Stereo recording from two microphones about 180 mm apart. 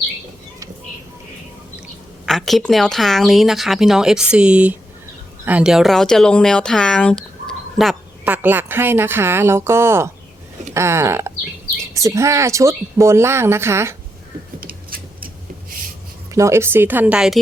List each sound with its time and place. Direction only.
2.2 s speech: centre (ahead or behind)
8.2 s speech: 10° right (ahead or behind)
14.6 s a sound: 55° right (ahead or behind)
16.3 s speech: 15° right (ahead or behind)